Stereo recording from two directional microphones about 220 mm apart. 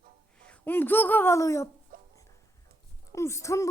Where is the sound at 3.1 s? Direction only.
15° left (ahead or behind).